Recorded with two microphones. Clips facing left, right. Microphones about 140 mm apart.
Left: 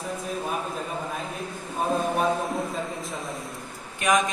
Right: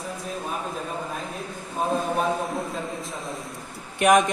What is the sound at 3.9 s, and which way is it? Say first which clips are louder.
Speech: right 5 dB; 65° right (ahead or behind).